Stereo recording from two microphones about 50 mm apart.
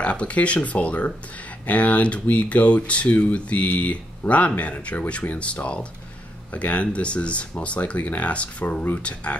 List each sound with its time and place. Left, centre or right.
0.0 s speech: left